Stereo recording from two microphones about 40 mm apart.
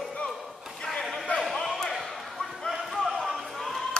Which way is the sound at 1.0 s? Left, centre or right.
Centre.